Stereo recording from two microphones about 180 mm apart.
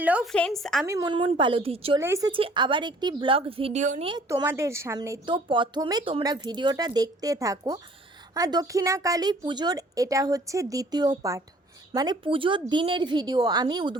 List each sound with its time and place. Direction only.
0.0 s a woman's voice: 5° right (ahead or behind)
0.3 s a woman's voice: 5° left (ahead or behind)
0.9 s a woman's voice: 20° right (ahead or behind)
2.0 s a woman's voice: 15° right (ahead or behind)
2.3 s a woman's voice: 30° right (ahead or behind)
4.3 s a woman's voice: 15° right (ahead or behind)